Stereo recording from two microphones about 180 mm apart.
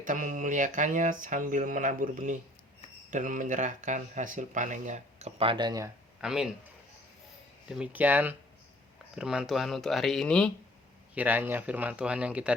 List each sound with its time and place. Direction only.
0.0 s speech: 45° right (ahead or behind); by 5.9 s 20° right (ahead or behind)
6.1 s speech: 5° right (ahead or behind)
7.7 s speech: 5° right (ahead or behind)
11.1 s speech: 10° right (ahead or behind)